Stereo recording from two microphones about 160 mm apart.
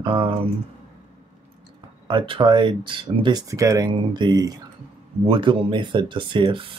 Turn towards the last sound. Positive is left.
turn(degrees=-30)  # may be behind; listen again after turning